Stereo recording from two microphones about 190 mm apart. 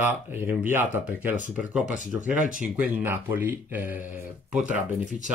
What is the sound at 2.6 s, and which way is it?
Speech, 10° right (ahead or behind).